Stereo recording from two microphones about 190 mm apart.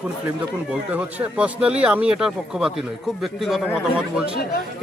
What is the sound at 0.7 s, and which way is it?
Speech, 5° right (ahead or behind).